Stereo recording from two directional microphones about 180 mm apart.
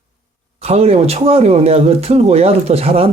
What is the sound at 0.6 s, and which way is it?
Speech, 35° right (ahead or behind).